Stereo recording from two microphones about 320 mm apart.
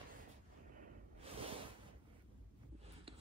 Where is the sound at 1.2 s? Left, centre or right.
Centre.